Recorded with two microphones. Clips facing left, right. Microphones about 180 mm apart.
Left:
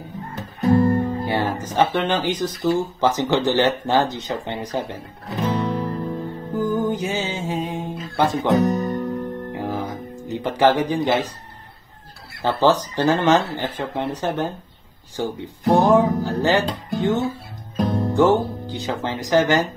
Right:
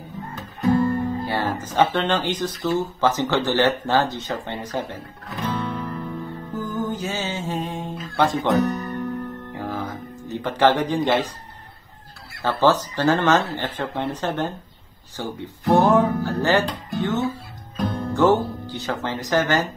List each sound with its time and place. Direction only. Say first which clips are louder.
0.4 s music: left 2 dB; 35° left (ahead or behind)
1.2 s music: left 2 dB; 15° left (ahead or behind)
1.8 s speech: even; 10° left (ahead or behind)
5.3 s music: left 4 dB; 35° left (ahead or behind)
6.5 s music: left 6 dB; 15° left (ahead or behind)
8.5 s guitar: left 3 dB; 35° left (ahead or behind)
9.6 s music: left 1 dB; 15° left (ahead or behind)
12.4 s speech: left 1 dB; 15° left (ahead or behind)
17.7 s music: left 4 dB; 35° left (ahead or behind)
18.1 s speech: even; 15° left (ahead or behind)